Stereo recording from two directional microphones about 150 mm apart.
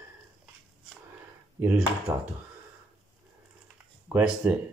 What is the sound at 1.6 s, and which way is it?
Speech, 10° right (ahead or behind).